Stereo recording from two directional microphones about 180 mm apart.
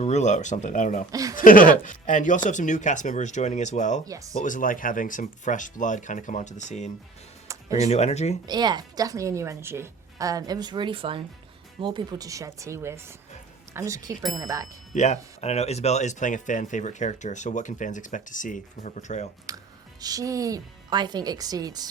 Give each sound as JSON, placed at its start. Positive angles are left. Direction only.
{"t": 0.0, "sound": "speech", "side_deg": 40}
{"t": 1.1, "sound": "a woman's voice", "side_deg": -20}
{"t": 1.4, "sound": "speech", "side_deg": 50}
{"t": 4.0, "sound": "a woman's voice", "side_deg": -20}
{"t": 4.4, "sound": "speech", "side_deg": 45}
{"t": 7.4, "sound": "music", "side_deg": -20}
{"t": 7.9, "sound": "speech", "side_deg": 35}
{"t": 8.4, "sound": "a woman's voice", "side_deg": -25}
{"t": 14.9, "sound": "speech", "side_deg": 40}
{"t": 20.0, "sound": "a woman's voice", "side_deg": -20}